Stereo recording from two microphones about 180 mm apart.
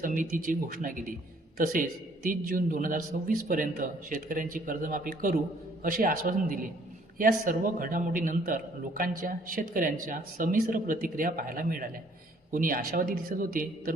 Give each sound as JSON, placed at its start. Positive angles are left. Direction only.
{"t": 0.0, "sound": "a man's voice", "side_deg": -50}